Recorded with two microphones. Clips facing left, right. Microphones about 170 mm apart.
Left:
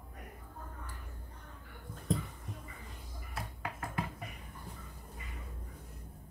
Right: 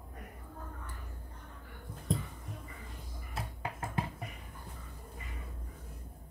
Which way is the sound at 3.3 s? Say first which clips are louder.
Right 2 dB; 25° right (ahead or behind).